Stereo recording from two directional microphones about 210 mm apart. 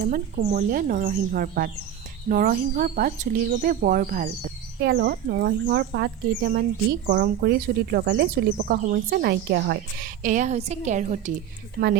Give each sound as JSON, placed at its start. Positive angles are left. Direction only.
{"t": 0.0, "sound": "speech", "side_deg": -40}
{"t": 4.8, "sound": "speech", "side_deg": -50}